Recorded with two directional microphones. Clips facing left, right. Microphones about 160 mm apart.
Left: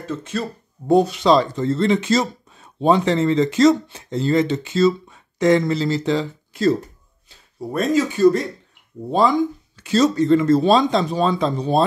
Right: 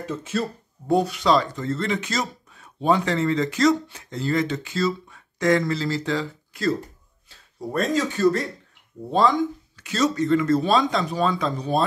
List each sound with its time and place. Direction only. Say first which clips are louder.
0.0 s speech: left 1 dB; 10° right (ahead or behind)
0.8 s speech: left 5 dB; 25° left (ahead or behind)
7.7 s speech: left 4 dB; 5° left (ahead or behind)
9.8 s speech: left 6 dB; 30° left (ahead or behind)